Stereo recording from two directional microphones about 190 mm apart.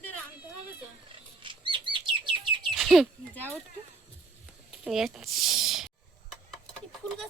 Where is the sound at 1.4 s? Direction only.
25° right (ahead or behind).